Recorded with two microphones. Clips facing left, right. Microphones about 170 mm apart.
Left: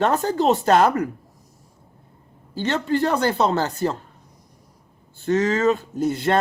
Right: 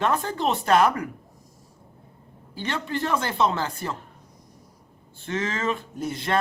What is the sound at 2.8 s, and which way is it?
Speech, 35° left (ahead or behind).